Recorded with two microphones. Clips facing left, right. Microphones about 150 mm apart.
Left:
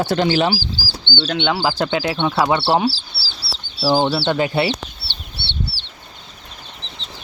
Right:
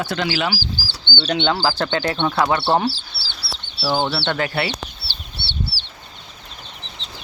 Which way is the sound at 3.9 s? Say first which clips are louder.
Left 4 dB; 30° left (ahead or behind).